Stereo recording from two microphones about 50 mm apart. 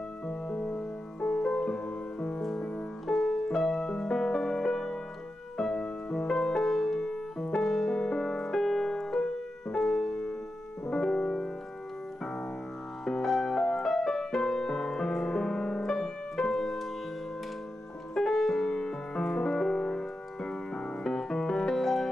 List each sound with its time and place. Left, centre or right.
0.3 s music: centre
7.6 s music: centre
7.9 s music: centre
13.0 s music: centre
18.1 s music: centre
19.6 s piano: centre